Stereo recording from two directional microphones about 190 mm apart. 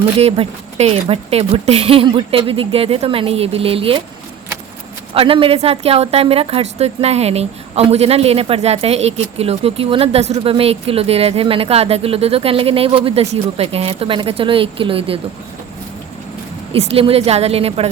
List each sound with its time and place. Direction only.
0.2 s speech: 35° right (ahead or behind)
5.1 s a woman's voice: 30° right (ahead or behind)
16.7 s a woman's voice: 30° right (ahead or behind)